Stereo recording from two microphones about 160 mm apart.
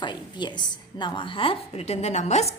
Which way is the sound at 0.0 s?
30° left (ahead or behind).